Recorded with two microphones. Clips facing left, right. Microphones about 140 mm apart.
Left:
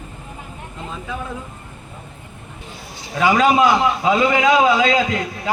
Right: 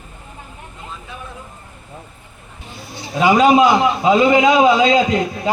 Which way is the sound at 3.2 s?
15° right (ahead or behind).